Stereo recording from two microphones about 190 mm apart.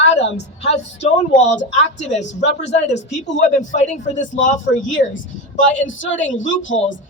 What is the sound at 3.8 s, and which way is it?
A woman's voice, 40° left (ahead or behind).